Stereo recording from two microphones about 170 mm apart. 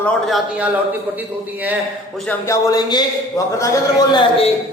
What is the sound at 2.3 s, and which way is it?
Speech, 15° left (ahead or behind).